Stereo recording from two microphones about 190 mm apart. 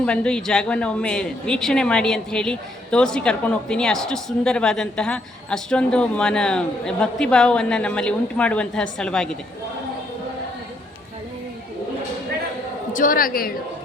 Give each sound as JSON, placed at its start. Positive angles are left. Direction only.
{"t": 0.0, "sound": "a woman's voice", "side_deg": 5}
{"t": 12.9, "sound": "a woman's voice", "side_deg": 45}